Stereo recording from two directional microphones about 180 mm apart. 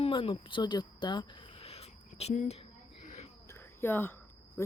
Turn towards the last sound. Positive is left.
turn(degrees=15)  # may be behind; listen again after turning